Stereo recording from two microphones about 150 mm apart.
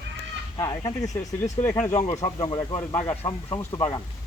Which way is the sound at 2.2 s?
30° left (ahead or behind).